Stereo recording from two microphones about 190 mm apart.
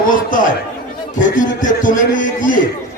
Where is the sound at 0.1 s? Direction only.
45° left (ahead or behind).